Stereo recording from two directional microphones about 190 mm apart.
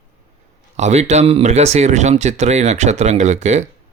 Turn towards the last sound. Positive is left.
turn(degrees=-35)  # may be behind; listen again after turning